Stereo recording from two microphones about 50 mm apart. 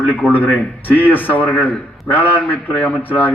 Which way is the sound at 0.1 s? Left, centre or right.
Left.